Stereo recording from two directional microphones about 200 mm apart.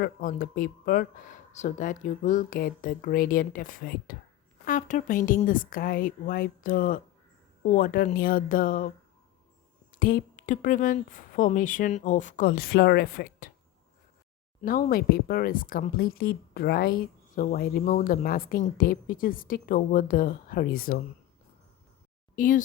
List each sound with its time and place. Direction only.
0.0 s speech: 45° left (ahead or behind)
10.0 s speech: 45° left (ahead or behind)
14.6 s speech: 45° left (ahead or behind)
22.4 s speech: 40° left (ahead or behind)